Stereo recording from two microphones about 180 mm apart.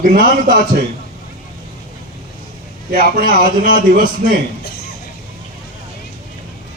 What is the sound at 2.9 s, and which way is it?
A man's voice, 50° right (ahead or behind).